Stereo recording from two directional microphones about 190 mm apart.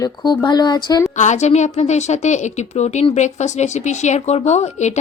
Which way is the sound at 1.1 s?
40° left (ahead or behind).